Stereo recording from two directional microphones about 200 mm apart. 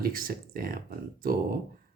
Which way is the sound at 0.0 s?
45° right (ahead or behind).